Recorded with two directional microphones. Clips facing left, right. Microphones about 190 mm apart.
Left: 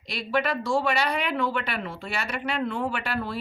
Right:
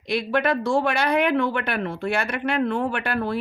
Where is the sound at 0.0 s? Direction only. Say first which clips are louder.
Right 4 dB; 55° right (ahead or behind).